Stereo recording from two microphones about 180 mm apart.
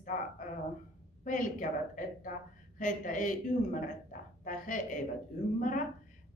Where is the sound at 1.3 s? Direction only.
45° left (ahead or behind).